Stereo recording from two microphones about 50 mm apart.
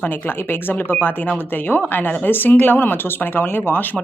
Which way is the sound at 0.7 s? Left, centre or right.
Left.